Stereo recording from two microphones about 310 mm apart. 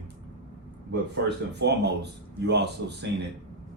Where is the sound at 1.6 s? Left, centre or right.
Right.